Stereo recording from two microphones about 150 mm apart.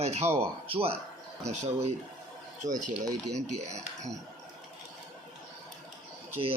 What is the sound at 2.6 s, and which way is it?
Speech, 55° right (ahead or behind).